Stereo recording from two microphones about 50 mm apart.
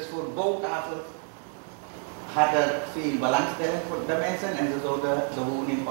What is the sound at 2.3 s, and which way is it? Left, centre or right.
A man's voice, centre.